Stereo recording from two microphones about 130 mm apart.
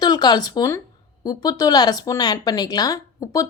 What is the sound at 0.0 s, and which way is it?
Speech, 30° left (ahead or behind).